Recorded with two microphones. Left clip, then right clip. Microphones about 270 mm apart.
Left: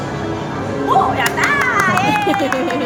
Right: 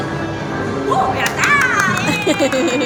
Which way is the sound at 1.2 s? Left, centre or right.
Centre.